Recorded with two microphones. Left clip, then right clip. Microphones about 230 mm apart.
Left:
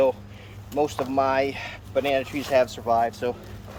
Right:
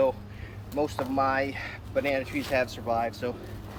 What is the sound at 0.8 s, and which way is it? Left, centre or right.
Speech, left.